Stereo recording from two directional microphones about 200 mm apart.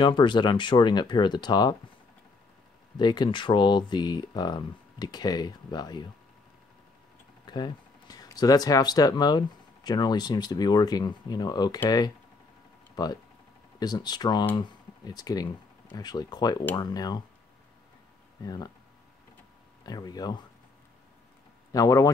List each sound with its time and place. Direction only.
0.0 s speech: 25° left (ahead or behind)
3.0 s speech: 20° left (ahead or behind)
7.4 s speech: 20° left (ahead or behind)
12.9 s speech: 20° left (ahead or behind)
18.4 s speech: 20° left (ahead or behind)
19.8 s speech: 20° left (ahead or behind)
21.7 s speech: 15° left (ahead or behind)